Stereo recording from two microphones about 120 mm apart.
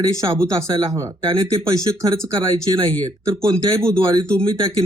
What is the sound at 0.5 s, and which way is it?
Speech, 45° right (ahead or behind).